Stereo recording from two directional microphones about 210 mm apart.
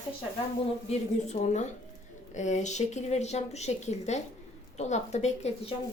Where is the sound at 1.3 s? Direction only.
35° left (ahead or behind).